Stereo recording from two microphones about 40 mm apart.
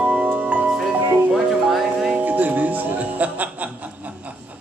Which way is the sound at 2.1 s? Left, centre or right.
Right.